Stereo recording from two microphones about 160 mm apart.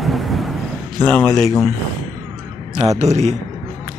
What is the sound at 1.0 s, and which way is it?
Speech, 5° left (ahead or behind).